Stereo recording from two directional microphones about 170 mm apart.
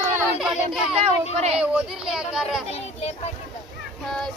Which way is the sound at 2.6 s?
40° left (ahead or behind).